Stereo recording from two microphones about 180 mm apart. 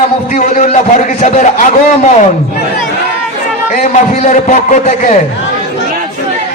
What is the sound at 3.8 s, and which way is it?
A man's voice, 40° left (ahead or behind).